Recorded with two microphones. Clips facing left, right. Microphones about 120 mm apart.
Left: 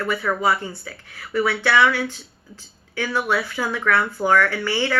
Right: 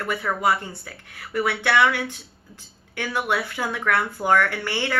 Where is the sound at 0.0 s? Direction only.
15° right (ahead or behind).